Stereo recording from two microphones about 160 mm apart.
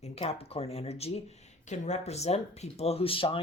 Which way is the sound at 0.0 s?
40° left (ahead or behind).